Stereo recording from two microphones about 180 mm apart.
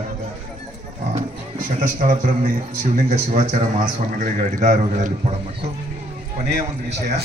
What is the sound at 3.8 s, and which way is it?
A man's voice, 45° right (ahead or behind).